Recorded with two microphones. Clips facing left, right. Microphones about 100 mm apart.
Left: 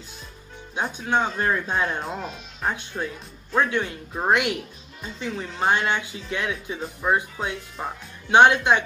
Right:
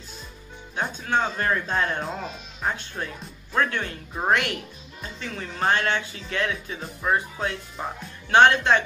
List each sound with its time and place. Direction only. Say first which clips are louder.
0.7 s speech: left 1 dB; 15° left (ahead or behind)
7.7 s speech: even; centre (ahead or behind)
8.3 s speech: left 1 dB; 15° left (ahead or behind)